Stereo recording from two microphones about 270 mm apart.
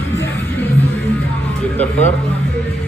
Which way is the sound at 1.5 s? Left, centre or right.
Centre.